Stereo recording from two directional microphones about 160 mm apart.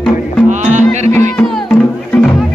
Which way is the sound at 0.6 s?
45° right (ahead or behind).